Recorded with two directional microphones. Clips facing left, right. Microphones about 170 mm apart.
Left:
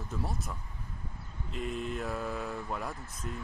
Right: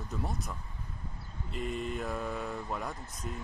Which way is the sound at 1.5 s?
Centre (ahead or behind).